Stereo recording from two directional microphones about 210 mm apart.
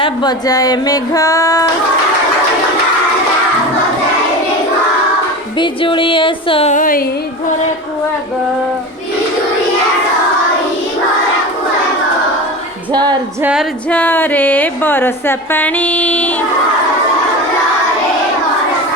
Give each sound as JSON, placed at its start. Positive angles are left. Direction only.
{"t": 0.0, "sound": "speech", "side_deg": 20}
{"t": 5.5, "sound": "music", "side_deg": 25}
{"t": 12.9, "sound": "speech", "side_deg": -20}
{"t": 13.4, "sound": "female singing", "side_deg": -5}
{"t": 13.9, "sound": "speech", "side_deg": 10}